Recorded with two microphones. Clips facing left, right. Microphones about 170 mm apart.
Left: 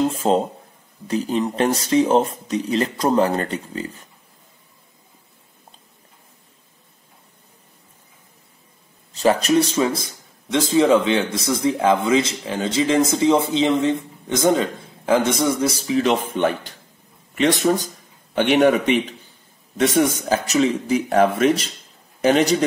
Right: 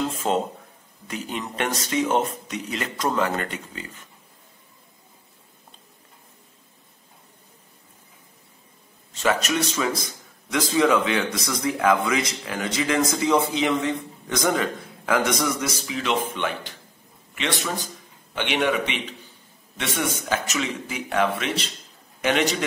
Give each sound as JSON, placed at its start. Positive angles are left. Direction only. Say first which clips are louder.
{"t": 0.0, "sound": "speech", "louder": "left 5 dB", "side_deg": 30}
{"t": 9.1, "sound": "a man's voice", "louder": "left 7 dB", "side_deg": 35}